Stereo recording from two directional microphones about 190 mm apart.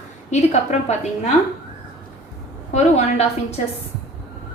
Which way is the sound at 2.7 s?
35° left (ahead or behind).